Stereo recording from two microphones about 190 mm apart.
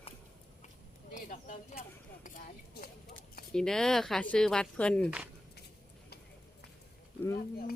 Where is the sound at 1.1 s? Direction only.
40° left (ahead or behind).